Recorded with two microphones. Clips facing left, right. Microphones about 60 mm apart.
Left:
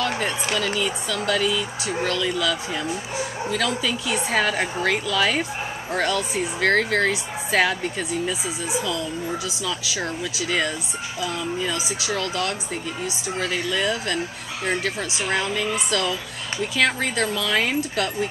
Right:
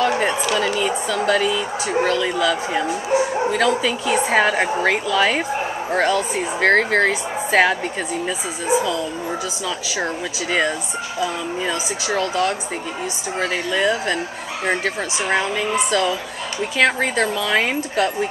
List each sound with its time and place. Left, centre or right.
0.6 s a woman's voice: centre
11.1 s speech: centre
15.2 s speech: centre